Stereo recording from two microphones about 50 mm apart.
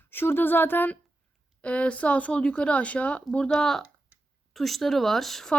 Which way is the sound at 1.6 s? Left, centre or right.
Left.